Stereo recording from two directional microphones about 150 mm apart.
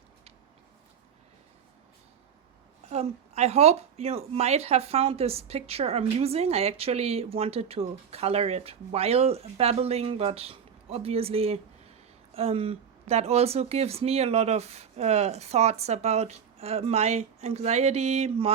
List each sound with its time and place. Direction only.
2.9 s speech: 45° right (ahead or behind)